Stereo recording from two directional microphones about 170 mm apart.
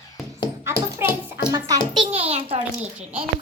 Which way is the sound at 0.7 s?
15° right (ahead or behind).